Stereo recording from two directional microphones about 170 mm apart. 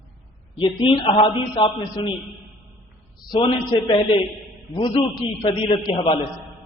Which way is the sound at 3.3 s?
30° left (ahead or behind).